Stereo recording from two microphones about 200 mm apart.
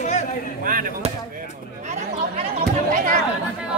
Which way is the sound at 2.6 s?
45° right (ahead or behind).